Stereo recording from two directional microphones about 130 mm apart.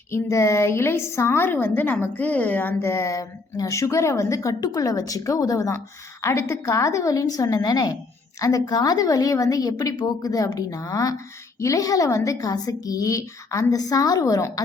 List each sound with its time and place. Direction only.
0.1 s a woman's voice: 20° left (ahead or behind)